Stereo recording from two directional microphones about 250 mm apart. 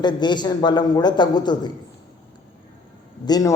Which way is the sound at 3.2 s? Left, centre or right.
Centre.